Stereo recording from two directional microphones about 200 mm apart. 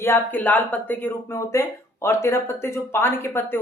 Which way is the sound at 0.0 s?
10° left (ahead or behind).